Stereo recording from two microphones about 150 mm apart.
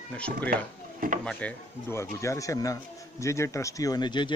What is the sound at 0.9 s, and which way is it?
Drawer open or close, 70° right (ahead or behind).